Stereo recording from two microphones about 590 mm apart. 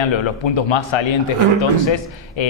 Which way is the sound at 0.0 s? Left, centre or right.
Left.